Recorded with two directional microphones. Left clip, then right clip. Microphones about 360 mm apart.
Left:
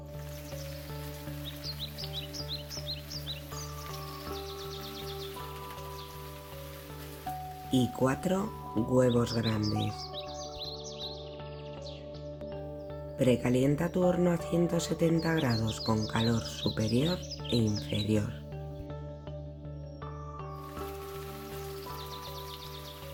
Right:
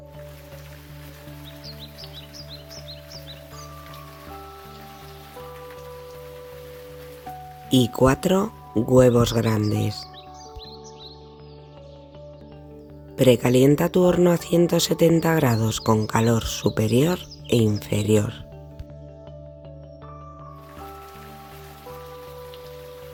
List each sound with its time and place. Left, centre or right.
1.6 s music: centre
7.7 s speech: right
13.1 s speech: right